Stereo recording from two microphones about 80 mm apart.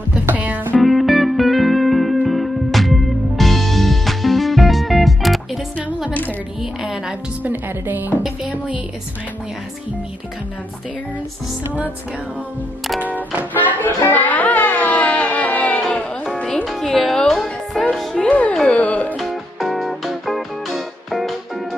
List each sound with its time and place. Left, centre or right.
0.1 s music: centre
0.7 s music: centre
6.6 s music: centre
7.4 s a woman's voice: right
8.2 s music: centre
13.7 s music: left
16.6 s music: centre
19.1 s music: centre